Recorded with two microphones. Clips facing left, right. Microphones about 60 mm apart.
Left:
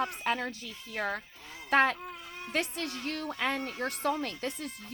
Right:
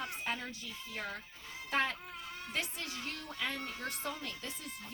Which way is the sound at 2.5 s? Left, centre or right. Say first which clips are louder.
Left 8 dB; left.